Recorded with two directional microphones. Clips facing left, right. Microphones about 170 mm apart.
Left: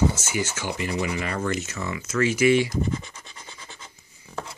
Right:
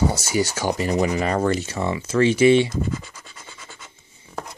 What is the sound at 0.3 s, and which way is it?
Speech, 35° right (ahead or behind).